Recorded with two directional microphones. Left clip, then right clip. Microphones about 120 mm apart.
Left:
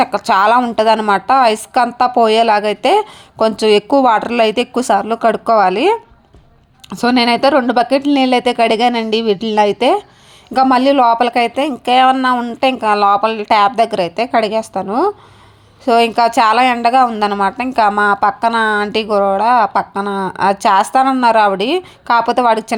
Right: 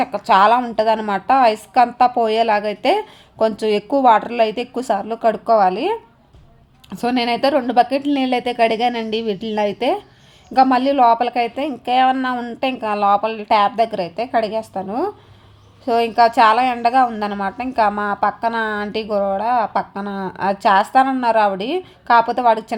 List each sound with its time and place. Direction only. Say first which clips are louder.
0.0 s a woman's voice: left 2 dB; 30° left (ahead or behind)
6.9 s a woman's voice: left 6 dB; 30° left (ahead or behind)
12.2 s a woman's voice: left 8 dB; 20° left (ahead or behind)
12.5 s a woman's voice: left 6 dB; 30° left (ahead or behind)